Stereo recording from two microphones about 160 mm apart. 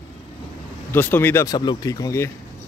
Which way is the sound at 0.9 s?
10° left (ahead or behind).